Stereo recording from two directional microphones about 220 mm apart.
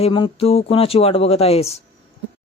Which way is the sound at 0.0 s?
25° left (ahead or behind).